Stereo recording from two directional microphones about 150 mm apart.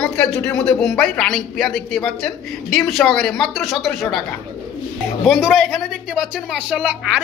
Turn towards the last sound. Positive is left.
turn(degrees=-10)  # may be behind; listen again after turning